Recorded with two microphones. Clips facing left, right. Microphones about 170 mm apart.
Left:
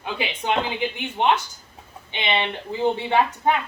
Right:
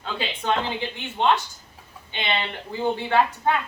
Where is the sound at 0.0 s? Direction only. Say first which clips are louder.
Left 1 dB; 15° left (ahead or behind).